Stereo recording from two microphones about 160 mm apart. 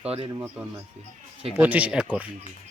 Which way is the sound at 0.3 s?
10° right (ahead or behind).